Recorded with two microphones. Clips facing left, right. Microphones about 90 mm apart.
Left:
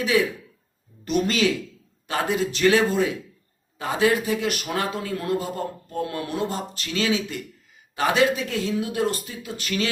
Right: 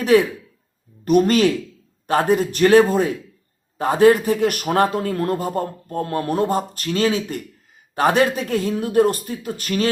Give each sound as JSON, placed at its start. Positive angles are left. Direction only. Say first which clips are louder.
{"t": 0.0, "sound": "speech", "louder": "right 6 dB", "side_deg": -55}